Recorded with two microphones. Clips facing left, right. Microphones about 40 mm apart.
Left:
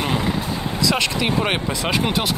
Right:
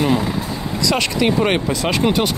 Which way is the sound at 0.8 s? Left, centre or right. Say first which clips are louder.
Right 3 dB; centre.